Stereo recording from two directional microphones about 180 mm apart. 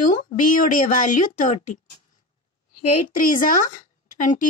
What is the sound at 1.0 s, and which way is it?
Speech, 45° left (ahead or behind).